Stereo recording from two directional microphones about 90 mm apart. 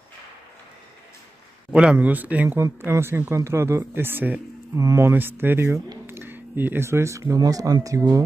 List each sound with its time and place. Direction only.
1.7 s speech: 10° right (ahead or behind)
2.6 s speech: 30° right (ahead or behind)
4.7 s speech: 40° right (ahead or behind)
5.0 s speech: 25° right (ahead or behind)
6.0 s a sound: 25° right (ahead or behind)
7.3 s speech: 45° right (ahead or behind)